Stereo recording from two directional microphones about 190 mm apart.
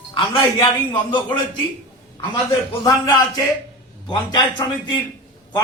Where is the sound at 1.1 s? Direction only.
25° left (ahead or behind).